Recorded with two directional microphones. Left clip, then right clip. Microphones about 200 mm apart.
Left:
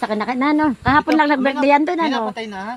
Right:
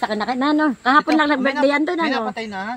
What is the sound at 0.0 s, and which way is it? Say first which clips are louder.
Speech: left 1 dB; 25° left (ahead or behind).